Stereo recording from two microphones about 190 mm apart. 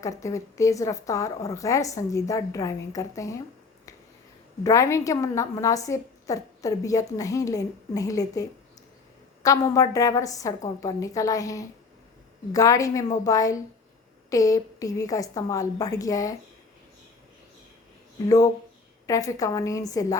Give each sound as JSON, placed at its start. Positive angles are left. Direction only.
{"t": 0.0, "sound": "a woman's voice", "side_deg": 15}
{"t": 4.6, "sound": "a woman's voice", "side_deg": 15}
{"t": 18.3, "sound": "a woman's voice", "side_deg": 15}